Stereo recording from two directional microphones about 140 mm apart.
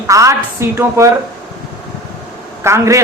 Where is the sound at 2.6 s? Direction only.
20° right (ahead or behind).